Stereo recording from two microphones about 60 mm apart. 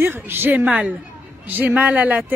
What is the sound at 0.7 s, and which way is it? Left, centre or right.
Speech, right.